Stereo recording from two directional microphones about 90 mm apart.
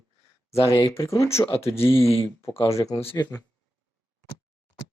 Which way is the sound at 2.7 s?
35° left (ahead or behind).